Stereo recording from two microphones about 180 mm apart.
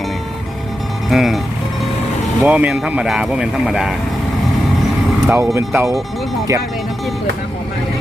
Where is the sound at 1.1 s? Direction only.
Centre (ahead or behind).